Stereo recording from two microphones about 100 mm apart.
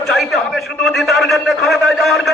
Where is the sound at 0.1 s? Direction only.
Centre (ahead or behind).